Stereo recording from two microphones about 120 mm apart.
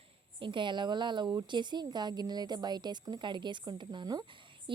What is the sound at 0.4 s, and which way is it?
A woman's voice, 40° right (ahead or behind).